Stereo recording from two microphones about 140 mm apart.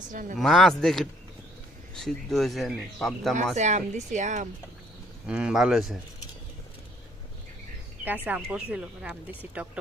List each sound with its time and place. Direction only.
0.1 s speech: 75° right (ahead or behind)
0.3 s speech: centre (ahead or behind)
3.5 s speech: 55° right (ahead or behind)
5.2 s speech: 5° right (ahead or behind)
8.0 s speech: 15° right (ahead or behind)